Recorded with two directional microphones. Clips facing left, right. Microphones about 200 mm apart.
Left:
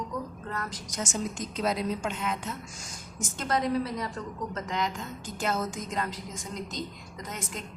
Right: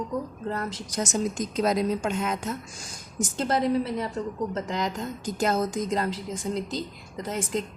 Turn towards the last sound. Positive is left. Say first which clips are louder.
# right 9 dB
turn(degrees=-30)  # may be behind; listen again after turning